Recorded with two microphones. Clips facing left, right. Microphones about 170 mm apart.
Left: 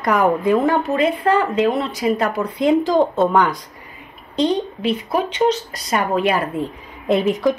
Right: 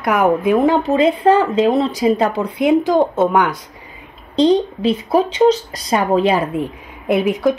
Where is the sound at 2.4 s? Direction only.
10° right (ahead or behind).